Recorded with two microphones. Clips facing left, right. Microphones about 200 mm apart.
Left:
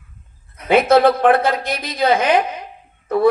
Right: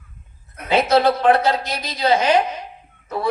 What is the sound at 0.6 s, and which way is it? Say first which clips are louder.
Speech: left 4 dB; 55° left (ahead or behind).